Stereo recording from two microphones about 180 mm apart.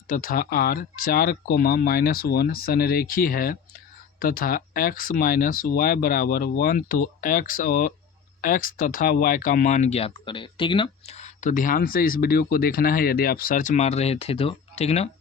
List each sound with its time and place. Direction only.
0.1 s speech: 50° left (ahead or behind)